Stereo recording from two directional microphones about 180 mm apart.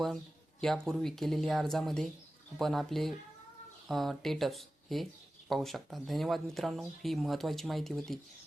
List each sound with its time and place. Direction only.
0.6 s speech: centre (ahead or behind)